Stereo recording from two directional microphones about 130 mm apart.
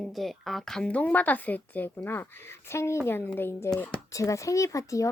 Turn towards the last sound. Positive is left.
turn(degrees=25)  # may be behind; listen again after turning